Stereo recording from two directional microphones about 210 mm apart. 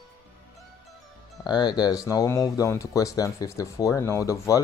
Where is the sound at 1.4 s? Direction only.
20° left (ahead or behind).